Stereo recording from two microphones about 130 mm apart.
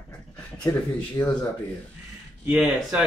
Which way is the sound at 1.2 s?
25° left (ahead or behind).